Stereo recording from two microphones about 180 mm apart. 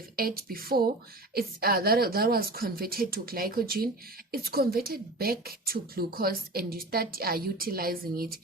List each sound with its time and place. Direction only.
0.2 s a woman's voice: 55° right (ahead or behind)